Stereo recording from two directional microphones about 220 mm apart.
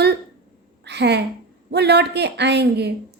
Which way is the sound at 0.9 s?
50° right (ahead or behind).